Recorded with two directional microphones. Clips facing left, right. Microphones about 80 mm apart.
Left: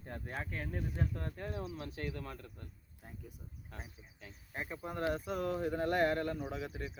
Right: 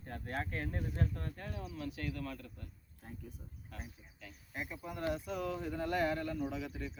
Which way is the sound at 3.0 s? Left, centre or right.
Centre.